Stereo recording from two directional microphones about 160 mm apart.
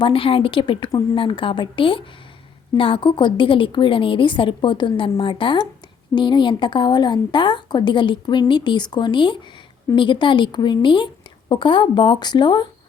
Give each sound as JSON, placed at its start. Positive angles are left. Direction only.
{"t": 0.0, "sound": "a woman's voice", "side_deg": 35}